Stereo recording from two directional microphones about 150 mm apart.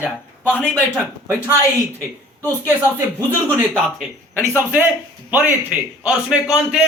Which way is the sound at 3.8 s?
Centre (ahead or behind).